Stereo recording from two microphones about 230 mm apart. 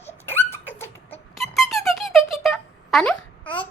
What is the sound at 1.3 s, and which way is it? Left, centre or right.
Music, centre.